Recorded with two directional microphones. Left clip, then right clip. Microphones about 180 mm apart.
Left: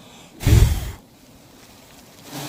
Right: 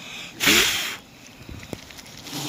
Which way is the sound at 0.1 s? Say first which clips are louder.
Right 8 dB; 20° left (ahead or behind).